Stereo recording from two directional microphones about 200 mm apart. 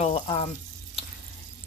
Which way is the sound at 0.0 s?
30° left (ahead or behind).